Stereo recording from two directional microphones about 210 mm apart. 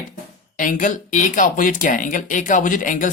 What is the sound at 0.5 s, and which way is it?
Speech, 40° left (ahead or behind).